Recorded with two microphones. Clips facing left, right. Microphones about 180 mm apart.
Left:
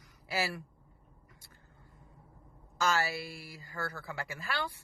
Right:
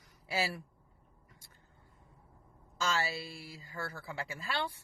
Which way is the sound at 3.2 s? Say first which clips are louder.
Left 1 dB; 20° right (ahead or behind).